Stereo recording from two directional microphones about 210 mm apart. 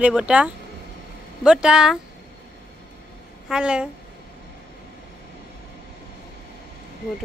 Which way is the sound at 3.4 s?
5° right (ahead or behind).